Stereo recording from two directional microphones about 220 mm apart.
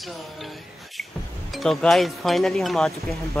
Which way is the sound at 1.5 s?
Centre (ahead or behind).